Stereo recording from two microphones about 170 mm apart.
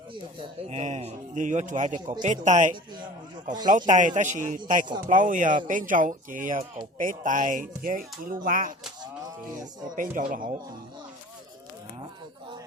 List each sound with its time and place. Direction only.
0.7 s speech: 40° right (ahead or behind)
9.9 s speech: 50° right (ahead or behind)